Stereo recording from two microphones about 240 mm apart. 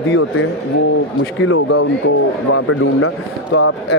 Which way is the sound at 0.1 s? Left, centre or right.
Left.